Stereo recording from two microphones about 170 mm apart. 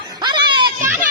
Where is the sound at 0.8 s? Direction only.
10° right (ahead or behind).